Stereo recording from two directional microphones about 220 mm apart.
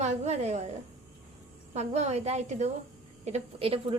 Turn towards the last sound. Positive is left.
turn(degrees=-30)  # may be behind; listen again after turning